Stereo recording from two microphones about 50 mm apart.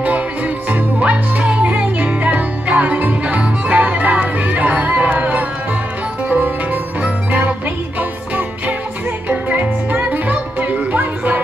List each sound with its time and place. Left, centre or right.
0.7 s music: right